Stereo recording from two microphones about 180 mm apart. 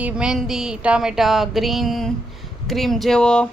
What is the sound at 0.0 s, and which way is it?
Speech, 5° right (ahead or behind).